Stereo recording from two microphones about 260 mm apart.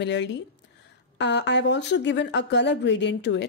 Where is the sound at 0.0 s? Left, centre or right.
Left.